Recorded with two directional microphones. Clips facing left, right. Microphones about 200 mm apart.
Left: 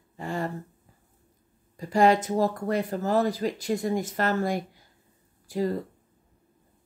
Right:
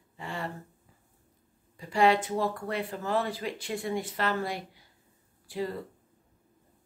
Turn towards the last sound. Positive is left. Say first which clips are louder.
# left 6 dB
turn(degrees=40)  # may be behind; listen again after turning